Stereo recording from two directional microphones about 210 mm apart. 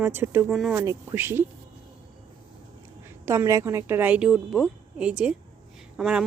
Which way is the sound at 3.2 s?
15° right (ahead or behind).